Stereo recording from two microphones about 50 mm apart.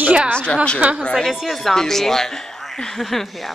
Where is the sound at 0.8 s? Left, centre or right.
Right.